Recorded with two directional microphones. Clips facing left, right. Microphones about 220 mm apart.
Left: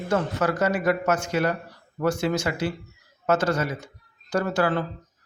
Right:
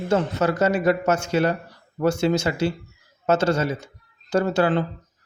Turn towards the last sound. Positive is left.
turn(degrees=-25)  # may be behind; listen again after turning